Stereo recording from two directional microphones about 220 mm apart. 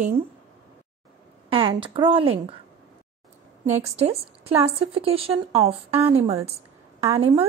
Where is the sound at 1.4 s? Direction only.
25° right (ahead or behind).